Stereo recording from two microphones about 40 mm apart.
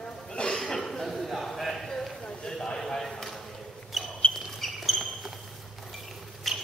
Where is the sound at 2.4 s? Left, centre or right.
Centre.